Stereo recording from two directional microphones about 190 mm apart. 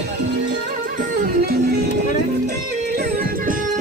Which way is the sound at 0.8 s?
45° right (ahead or behind).